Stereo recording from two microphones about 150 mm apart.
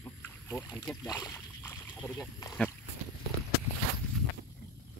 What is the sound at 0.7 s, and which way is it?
Speech, 5° right (ahead or behind).